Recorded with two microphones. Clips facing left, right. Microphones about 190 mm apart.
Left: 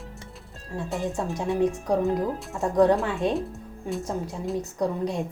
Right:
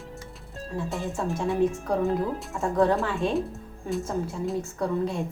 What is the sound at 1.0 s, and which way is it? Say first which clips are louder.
Speech: left 1 dB; 15° left (ahead or behind).